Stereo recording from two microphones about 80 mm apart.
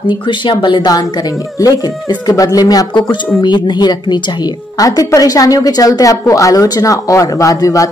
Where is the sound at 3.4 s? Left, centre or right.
Left.